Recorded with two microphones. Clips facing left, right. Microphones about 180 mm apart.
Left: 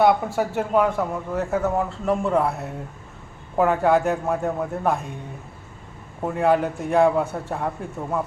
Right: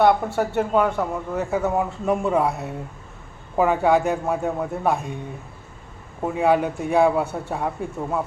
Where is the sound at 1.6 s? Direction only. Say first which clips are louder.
Right 1 dB; 10° right (ahead or behind).